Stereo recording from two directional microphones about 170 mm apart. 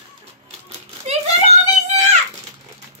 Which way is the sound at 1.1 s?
40° right (ahead or behind).